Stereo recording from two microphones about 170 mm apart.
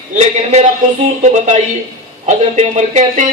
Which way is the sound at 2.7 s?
45° right (ahead or behind).